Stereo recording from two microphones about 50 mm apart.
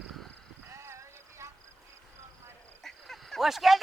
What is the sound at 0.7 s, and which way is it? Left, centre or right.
Music, right.